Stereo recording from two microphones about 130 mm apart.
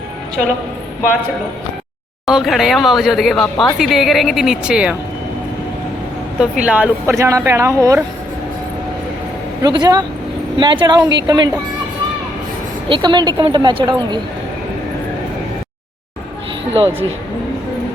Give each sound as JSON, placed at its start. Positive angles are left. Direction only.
{"t": 2.2, "sound": "speech", "side_deg": 0}
{"t": 6.4, "sound": "a woman's voice", "side_deg": -10}
{"t": 7.2, "sound": "speech", "side_deg": -25}
{"t": 9.6, "sound": "a woman's voice", "side_deg": -30}
{"t": 12.9, "sound": "a woman's voice", "side_deg": -35}